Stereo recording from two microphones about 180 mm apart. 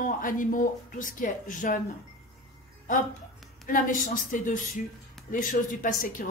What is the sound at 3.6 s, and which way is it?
A woman's voice, 50° left (ahead or behind).